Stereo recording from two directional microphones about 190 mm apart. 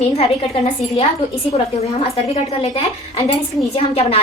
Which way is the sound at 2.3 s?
30° left (ahead or behind).